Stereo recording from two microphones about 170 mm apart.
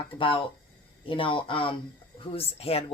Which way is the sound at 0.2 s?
30° left (ahead or behind).